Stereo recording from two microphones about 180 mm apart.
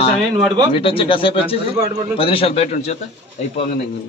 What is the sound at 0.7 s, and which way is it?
Speech, 30° left (ahead or behind).